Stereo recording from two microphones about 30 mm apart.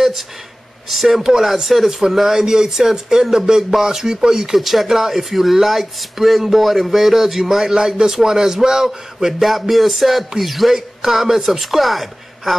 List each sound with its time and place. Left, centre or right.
0.8 s a man's voice: centre
4.6 s a man's voice: centre